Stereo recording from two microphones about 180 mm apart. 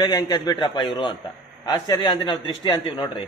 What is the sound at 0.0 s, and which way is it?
A man's voice, 20° left (ahead or behind).